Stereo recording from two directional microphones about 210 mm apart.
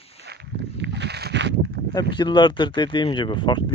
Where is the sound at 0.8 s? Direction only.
55° right (ahead or behind).